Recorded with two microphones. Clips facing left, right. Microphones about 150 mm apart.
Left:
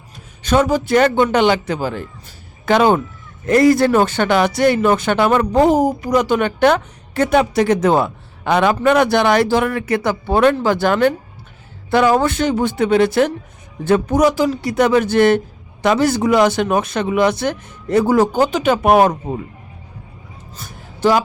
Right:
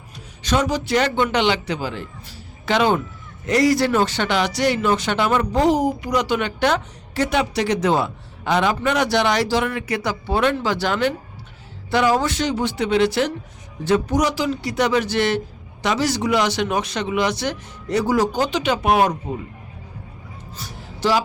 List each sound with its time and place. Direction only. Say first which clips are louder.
0.4 s speech: left 5 dB; 50° left (ahead or behind)
20.6 s music: left 5 dB; 50° left (ahead or behind)